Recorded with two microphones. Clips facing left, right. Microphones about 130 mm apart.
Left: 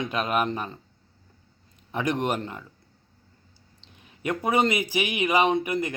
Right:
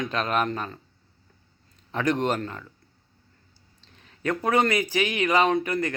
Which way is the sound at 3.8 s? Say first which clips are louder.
Right 1 dB; 15° left (ahead or behind).